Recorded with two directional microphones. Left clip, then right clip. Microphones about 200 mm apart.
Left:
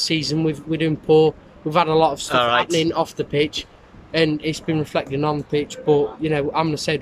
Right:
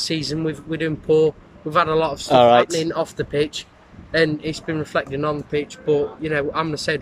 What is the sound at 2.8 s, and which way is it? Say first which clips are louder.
A man's voice: left 2 dB; 10° left (ahead or behind).